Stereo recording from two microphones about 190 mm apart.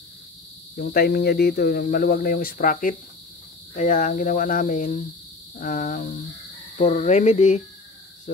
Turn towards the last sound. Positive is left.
turn(degrees=35)  # may be behind; listen again after turning